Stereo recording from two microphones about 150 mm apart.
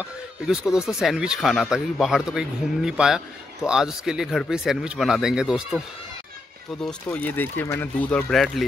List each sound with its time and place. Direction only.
0.0 s speech: 5° right (ahead or behind)
7.1 s speech: 10° left (ahead or behind)